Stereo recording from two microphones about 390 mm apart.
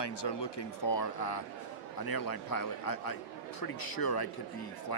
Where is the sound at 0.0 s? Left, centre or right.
Left.